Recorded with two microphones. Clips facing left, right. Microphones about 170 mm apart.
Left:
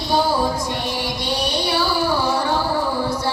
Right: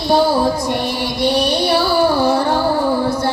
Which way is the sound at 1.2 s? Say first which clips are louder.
Right 9 dB; 60° right (ahead or behind).